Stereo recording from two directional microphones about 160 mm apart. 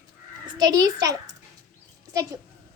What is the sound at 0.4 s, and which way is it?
Speech, 25° right (ahead or behind).